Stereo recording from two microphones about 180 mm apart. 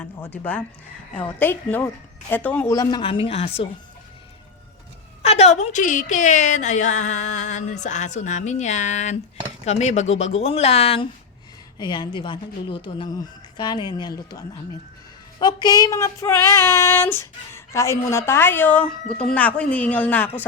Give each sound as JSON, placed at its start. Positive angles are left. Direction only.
{"t": 0.2, "sound": "child singing", "side_deg": 10}
{"t": 2.7, "sound": "a woman's voice", "side_deg": 20}
{"t": 5.2, "sound": "a woman's voice", "side_deg": 35}
{"t": 15.4, "sound": "child singing", "side_deg": 25}